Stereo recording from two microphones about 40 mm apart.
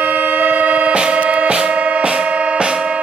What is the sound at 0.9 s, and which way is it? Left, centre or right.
Music, right.